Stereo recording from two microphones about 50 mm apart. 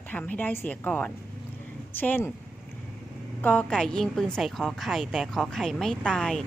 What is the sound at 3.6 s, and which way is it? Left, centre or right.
A woman's voice, centre.